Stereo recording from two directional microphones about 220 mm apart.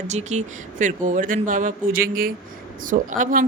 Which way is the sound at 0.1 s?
30° right (ahead or behind).